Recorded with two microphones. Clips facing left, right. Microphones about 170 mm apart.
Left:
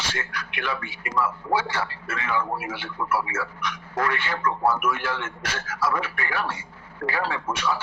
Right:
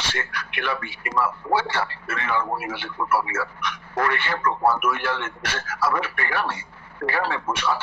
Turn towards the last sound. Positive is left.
turn(degrees=-60)  # may be behind; listen again after turning